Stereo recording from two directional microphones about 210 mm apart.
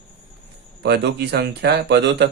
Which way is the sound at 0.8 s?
55° right (ahead or behind).